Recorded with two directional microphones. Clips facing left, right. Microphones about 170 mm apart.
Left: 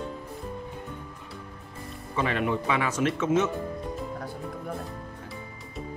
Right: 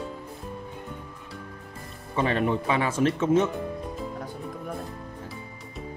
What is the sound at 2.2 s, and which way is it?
Speech, 35° right (ahead or behind).